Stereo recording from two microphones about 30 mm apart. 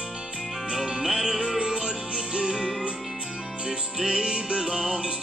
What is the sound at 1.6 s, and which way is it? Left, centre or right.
Music, right.